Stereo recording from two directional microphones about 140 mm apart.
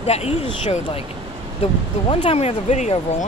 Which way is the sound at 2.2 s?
50° left (ahead or behind).